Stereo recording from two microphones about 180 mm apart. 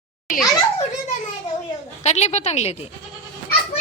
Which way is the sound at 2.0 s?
40° left (ahead or behind).